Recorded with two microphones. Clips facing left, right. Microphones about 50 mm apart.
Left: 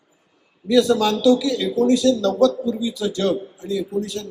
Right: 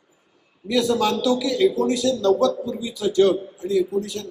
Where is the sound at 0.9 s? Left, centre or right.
Right.